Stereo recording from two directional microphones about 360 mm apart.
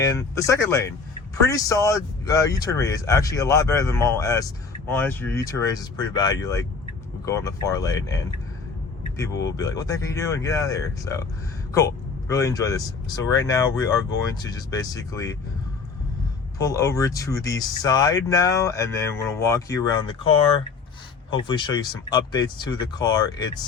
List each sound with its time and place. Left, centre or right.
0.0 s speech: centre
9.4 s speech: centre
12.3 s speech: centre
16.6 s speech: centre
21.2 s speech: centre